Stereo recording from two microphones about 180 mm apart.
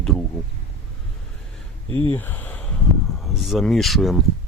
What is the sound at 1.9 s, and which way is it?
Speech, 30° right (ahead or behind).